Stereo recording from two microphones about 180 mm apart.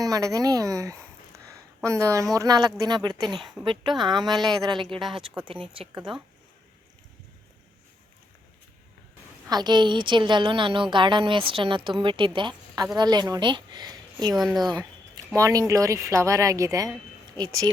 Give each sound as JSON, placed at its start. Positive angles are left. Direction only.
{"t": 0.0, "sound": "a woman's voice", "side_deg": -20}
{"t": 1.5, "sound": "a sound", "side_deg": -15}
{"t": 2.3, "sound": "a woman's voice", "side_deg": -20}
{"t": 3.2, "sound": "speech", "side_deg": 0}
{"t": 3.6, "sound": "a woman's voice", "side_deg": -25}
{"t": 5.9, "sound": "speech", "side_deg": -5}
{"t": 9.5, "sound": "a woman's voice", "side_deg": -25}
{"t": 14.3, "sound": "speech", "side_deg": 0}
{"t": 14.7, "sound": "a sound", "side_deg": -25}
{"t": 15.4, "sound": "speech", "side_deg": -15}